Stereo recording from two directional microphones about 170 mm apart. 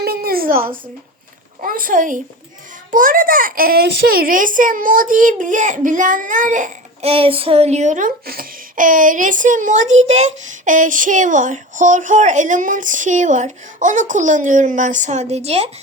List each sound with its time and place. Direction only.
0.0 s a sound: 65° right (ahead or behind)
1.6 s a child's voice: 55° right (ahead or behind)
7.1 s a child's voice: 35° right (ahead or behind)